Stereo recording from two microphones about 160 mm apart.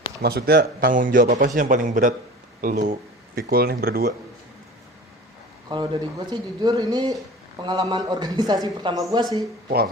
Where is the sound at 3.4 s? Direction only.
75° right (ahead or behind).